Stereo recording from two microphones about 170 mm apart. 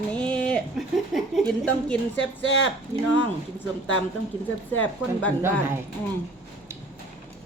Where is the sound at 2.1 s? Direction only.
90° left.